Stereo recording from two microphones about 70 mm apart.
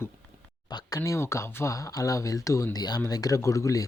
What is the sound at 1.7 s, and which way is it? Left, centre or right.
Speech, left.